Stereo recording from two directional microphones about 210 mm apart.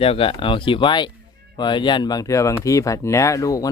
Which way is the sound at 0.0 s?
25° left (ahead or behind).